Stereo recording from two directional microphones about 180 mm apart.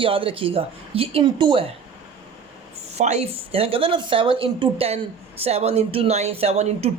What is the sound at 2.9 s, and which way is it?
Speech, 40° right (ahead or behind).